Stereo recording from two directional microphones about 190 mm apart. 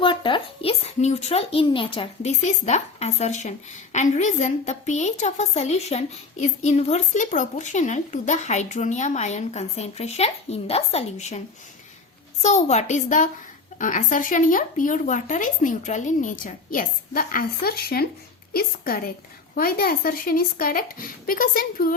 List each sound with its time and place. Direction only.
0.0 s a child's voice: 25° left (ahead or behind)
12.4 s a child's voice: 35° left (ahead or behind)